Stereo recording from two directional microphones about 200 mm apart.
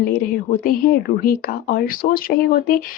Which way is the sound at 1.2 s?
45° left (ahead or behind).